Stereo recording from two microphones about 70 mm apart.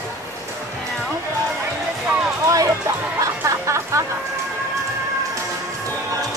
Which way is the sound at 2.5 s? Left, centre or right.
Right.